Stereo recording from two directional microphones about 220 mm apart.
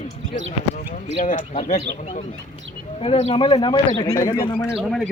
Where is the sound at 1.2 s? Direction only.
35° left (ahead or behind).